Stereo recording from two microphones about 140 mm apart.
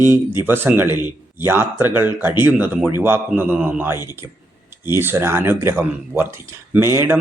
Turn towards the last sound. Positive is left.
turn(degrees=-20)  # may be behind; listen again after turning